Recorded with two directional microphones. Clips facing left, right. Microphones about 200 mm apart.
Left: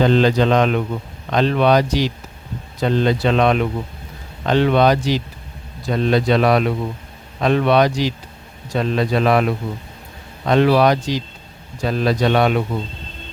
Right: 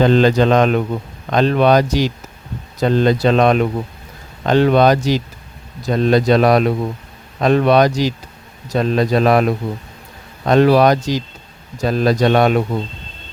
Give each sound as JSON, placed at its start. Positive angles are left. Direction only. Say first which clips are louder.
{"t": 0.0, "sound": "speech", "louder": "right 2 dB", "side_deg": -50}